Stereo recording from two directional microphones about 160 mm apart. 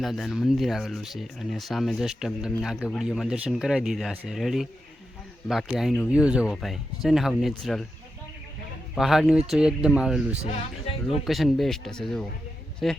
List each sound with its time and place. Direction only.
0.0 s speech: centre (ahead or behind)
9.0 s speech: centre (ahead or behind)
10.4 s speech: 40° left (ahead or behind)
11.3 s speech: centre (ahead or behind)